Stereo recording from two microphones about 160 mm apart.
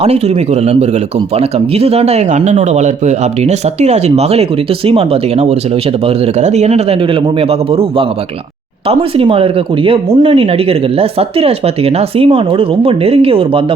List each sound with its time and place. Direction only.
0.0 s speech: 40° right (ahead or behind)